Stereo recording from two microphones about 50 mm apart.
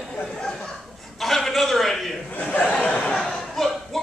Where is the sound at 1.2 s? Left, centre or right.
Centre.